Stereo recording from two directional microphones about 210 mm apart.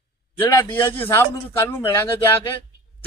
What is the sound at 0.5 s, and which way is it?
A woman's voice, 10° left (ahead or behind).